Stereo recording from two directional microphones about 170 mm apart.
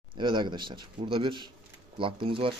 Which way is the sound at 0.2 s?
25° right (ahead or behind).